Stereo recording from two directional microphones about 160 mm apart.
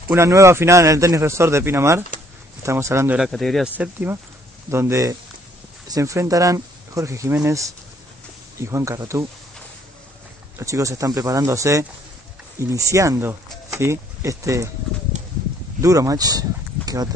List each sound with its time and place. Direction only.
0.1 s a man's voice: 20° right (ahead or behind)
3.2 s speech: centre (ahead or behind)
3.7 s a man's voice: 10° right (ahead or behind)
8.5 s a man's voice: 15° right (ahead or behind)
10.6 s speech: 20° right (ahead or behind)
15.8 s speech: 20° right (ahead or behind)